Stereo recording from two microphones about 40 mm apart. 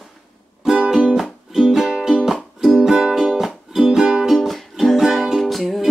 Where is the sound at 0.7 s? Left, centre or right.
Centre.